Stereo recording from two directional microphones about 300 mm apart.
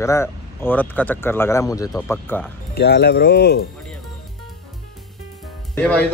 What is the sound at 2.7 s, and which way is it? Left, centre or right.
Speech, left.